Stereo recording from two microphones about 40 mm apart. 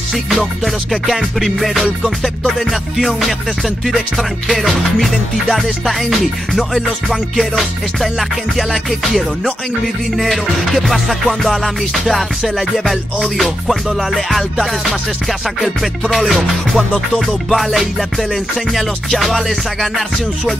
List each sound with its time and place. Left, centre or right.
0.1 s music: centre